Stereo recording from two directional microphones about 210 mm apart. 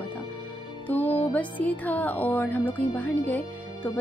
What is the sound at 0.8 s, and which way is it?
Music, 10° left (ahead or behind).